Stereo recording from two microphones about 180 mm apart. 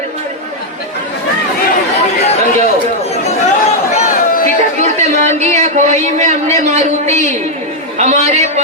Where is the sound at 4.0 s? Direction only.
50° left (ahead or behind).